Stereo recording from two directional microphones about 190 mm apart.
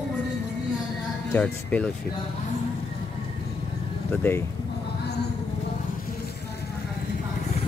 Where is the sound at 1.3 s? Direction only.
5° left (ahead or behind).